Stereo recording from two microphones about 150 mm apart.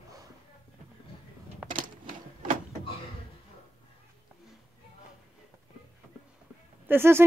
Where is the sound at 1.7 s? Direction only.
60° right (ahead or behind).